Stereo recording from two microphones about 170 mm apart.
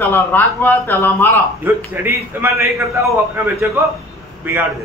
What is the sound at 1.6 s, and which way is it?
A man's voice, 10° right (ahead or behind).